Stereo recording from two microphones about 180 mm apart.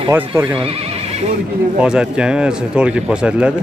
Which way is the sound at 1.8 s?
5° right (ahead or behind).